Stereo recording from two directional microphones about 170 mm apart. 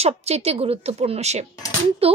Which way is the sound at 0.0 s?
40° right (ahead or behind).